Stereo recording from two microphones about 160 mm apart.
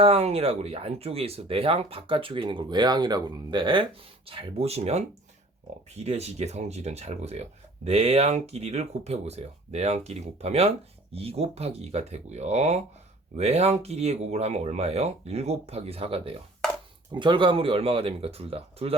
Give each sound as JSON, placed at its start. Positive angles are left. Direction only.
{"t": 0.0, "sound": "speech", "side_deg": -40}